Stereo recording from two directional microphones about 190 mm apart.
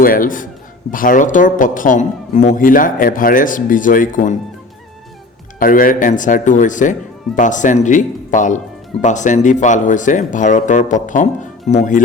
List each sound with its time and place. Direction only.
0.0 s a man's voice: 45° left (ahead or behind)
5.5 s a man's voice: 50° left (ahead or behind)